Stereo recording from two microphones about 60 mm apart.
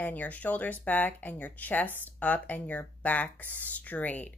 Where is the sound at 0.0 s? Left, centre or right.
Left.